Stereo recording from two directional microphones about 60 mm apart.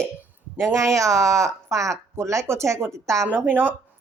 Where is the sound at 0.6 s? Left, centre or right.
Right.